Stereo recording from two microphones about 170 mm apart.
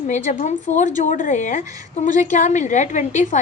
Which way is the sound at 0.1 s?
45° left (ahead or behind).